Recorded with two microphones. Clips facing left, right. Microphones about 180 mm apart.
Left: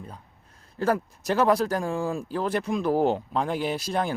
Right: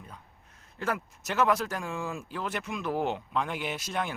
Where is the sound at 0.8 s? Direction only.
35° left (ahead or behind).